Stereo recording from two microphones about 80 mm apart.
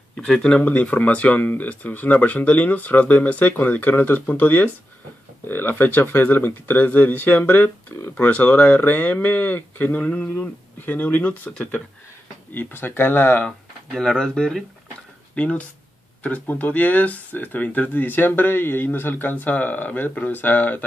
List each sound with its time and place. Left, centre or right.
0.1 s speech: centre
0.6 s speech: left
12.5 s speech: left
13.9 s speech: centre; by 20.8 s left